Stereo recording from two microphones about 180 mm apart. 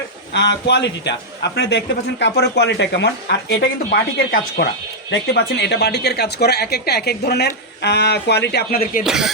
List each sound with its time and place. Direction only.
0.3 s a man's voice: 75° left (ahead or behind)
5.1 s a woman's voice: 70° left (ahead or behind); by 9.0 s 50° left (ahead or behind)
9.0 s a sound: 5° right (ahead or behind)